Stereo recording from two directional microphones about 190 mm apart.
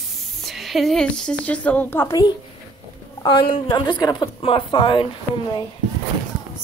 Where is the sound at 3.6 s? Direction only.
25° left (ahead or behind).